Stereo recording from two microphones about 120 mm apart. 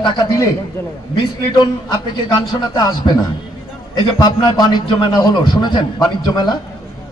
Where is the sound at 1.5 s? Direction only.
40° left (ahead or behind).